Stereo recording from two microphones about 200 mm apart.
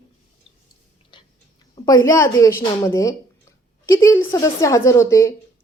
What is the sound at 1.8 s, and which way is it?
Speech, 20° left (ahead or behind).